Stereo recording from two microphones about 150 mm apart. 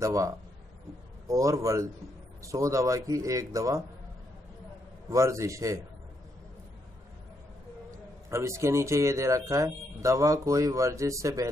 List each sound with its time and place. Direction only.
0.0 s speech: 20° right (ahead or behind)
5.1 s speech: 20° right (ahead or behind)
8.3 s speech: 20° right (ahead or behind)